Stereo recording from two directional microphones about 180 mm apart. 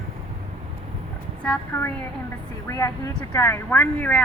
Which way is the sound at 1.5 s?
15° left (ahead or behind).